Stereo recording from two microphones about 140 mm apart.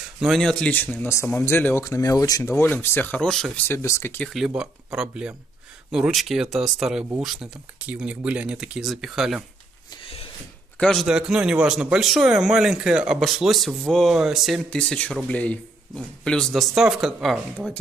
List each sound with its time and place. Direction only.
0.2 s speech: centre (ahead or behind)
3.6 s speech: 20° left (ahead or behind)
4.3 s speech: 5° right (ahead or behind)
10.0 s a sound: 40° left (ahead or behind)
10.8 s a man's voice: 5° left (ahead or behind)
11.1 s speech: 5° right (ahead or behind)